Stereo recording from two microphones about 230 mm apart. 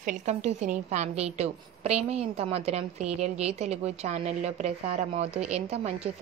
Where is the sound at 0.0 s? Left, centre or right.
Right.